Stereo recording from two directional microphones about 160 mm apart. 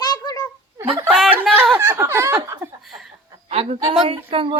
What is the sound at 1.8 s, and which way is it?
Speech, 15° right (ahead or behind).